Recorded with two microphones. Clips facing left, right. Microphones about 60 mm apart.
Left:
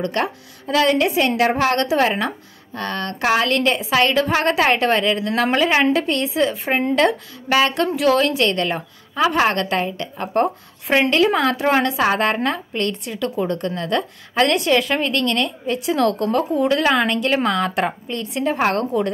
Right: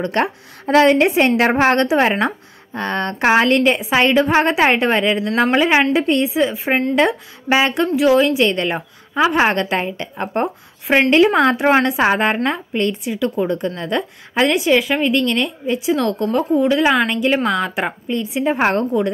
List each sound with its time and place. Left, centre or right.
0.0 s a woman's voice: right; by 6.8 s centre
7.4 s a woman's voice: right
7.7 s a woman's voice: centre